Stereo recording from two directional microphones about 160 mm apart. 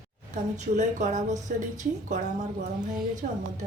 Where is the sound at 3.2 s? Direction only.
60° right (ahead or behind).